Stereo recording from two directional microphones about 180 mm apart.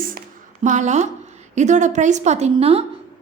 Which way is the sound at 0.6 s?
40° right (ahead or behind).